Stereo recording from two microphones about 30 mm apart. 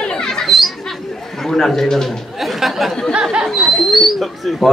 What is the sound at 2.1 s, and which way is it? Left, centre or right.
Speech, centre.